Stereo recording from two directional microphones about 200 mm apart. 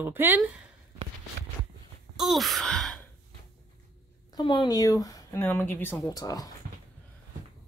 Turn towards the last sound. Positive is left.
turn(degrees=20)  # may be behind; listen again after turning